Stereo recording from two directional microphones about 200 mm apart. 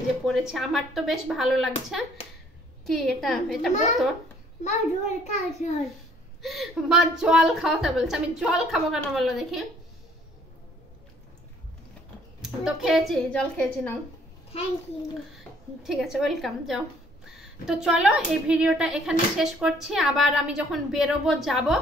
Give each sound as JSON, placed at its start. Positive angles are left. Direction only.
{"t": 0.3, "sound": "speech", "side_deg": 0}
{"t": 4.6, "sound": "a child's voice", "side_deg": 35}
{"t": 6.4, "sound": "speech", "side_deg": 0}
{"t": 12.4, "sound": "speech", "side_deg": 0}
{"t": 15.3, "sound": "speech", "side_deg": 0}